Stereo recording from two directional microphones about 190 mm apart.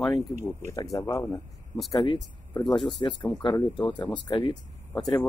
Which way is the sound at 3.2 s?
5° left (ahead or behind).